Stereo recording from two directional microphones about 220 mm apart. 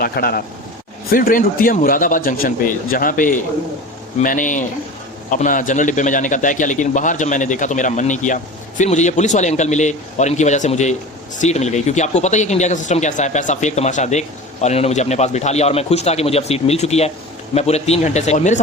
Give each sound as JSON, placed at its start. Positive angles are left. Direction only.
{"t": 0.0, "sound": "a man's voice", "side_deg": 45}